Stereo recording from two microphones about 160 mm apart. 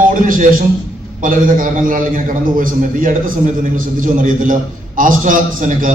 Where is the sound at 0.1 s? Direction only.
60° right (ahead or behind).